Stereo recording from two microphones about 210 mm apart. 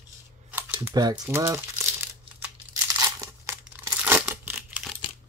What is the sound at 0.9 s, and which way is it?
Speech, 20° right (ahead or behind).